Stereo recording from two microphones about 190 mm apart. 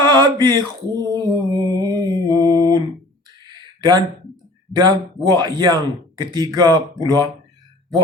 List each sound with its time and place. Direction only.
0.0 s mantra: 25° right (ahead or behind)
3.4 s a sound: 20° right (ahead or behind)
4.8 s a man's voice: 20° right (ahead or behind)